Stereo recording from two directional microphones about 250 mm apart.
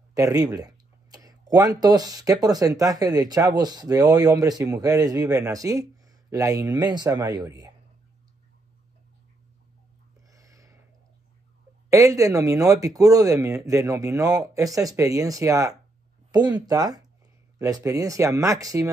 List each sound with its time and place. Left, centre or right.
0.1 s speech: centre
10.3 s a sound: centre
11.9 s speech: centre